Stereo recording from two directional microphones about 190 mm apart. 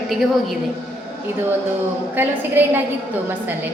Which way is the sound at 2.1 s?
10° right (ahead or behind).